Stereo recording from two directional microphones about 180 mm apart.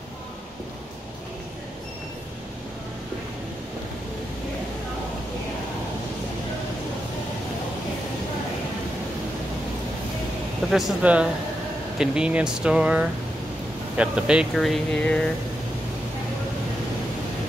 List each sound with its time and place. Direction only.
10.7 s speech: 5° right (ahead or behind)